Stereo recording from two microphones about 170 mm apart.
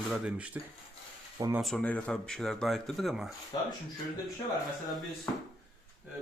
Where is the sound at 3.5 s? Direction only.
25° left (ahead or behind).